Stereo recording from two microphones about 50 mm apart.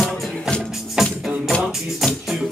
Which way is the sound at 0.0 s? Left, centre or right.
Centre.